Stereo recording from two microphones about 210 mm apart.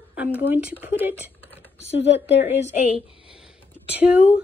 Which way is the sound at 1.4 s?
10° left (ahead or behind).